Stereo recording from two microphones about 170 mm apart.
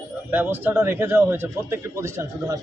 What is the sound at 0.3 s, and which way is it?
Speech, 10° right (ahead or behind).